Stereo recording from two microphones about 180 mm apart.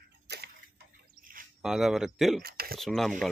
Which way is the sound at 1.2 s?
50° right (ahead or behind).